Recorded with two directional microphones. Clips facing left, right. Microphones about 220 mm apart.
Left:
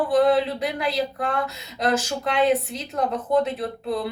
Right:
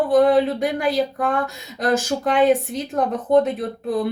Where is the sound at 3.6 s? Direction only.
50° right (ahead or behind).